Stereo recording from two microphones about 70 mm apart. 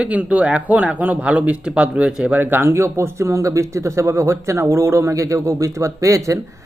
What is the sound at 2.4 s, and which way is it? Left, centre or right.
Speech, right.